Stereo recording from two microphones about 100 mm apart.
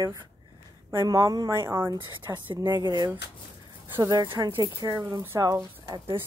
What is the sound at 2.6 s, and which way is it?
Speech, 45° right (ahead or behind).